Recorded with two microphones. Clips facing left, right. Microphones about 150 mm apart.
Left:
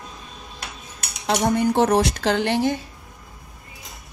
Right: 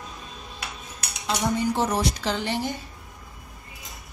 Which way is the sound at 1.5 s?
60° left (ahead or behind).